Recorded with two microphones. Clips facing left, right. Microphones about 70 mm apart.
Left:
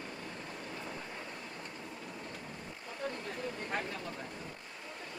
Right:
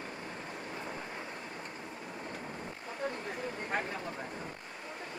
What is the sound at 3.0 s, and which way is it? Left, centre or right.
Vehicle, centre.